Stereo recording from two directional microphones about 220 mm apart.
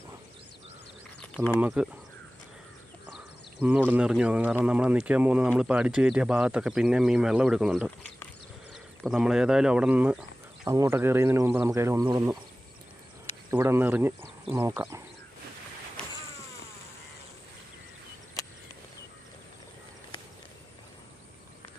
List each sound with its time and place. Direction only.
1.5 s speech: 5° right (ahead or behind)
3.6 s speech: 5° right (ahead or behind)
13.5 s speech: 10° right (ahead or behind)